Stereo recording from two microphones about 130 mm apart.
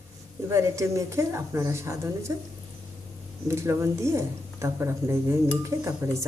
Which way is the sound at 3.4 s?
20° right (ahead or behind).